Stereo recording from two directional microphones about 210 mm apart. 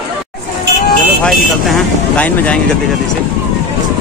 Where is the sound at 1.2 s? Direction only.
5° left (ahead or behind).